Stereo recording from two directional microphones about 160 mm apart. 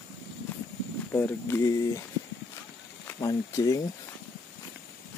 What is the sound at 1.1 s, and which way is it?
Speech, 15° left (ahead or behind).